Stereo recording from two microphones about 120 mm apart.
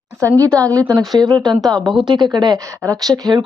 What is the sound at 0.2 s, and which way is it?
A woman's voice, 25° right (ahead or behind).